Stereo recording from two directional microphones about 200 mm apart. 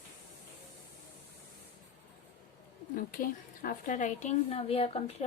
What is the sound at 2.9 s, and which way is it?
A woman's voice, 45° left (ahead or behind).